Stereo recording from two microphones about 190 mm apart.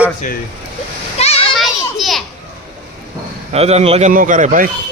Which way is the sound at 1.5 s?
Centre (ahead or behind).